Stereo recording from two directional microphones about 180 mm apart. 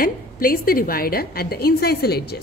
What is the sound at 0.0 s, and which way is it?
A woman's voice, 50° left (ahead or behind).